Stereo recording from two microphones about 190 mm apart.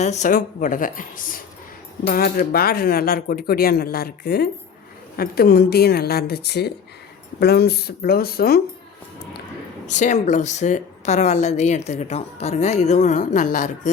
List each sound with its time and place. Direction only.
0.0 s speech: 40° left (ahead or behind); by 8.6 s 55° left (ahead or behind)
9.8 s speech: 40° left (ahead or behind)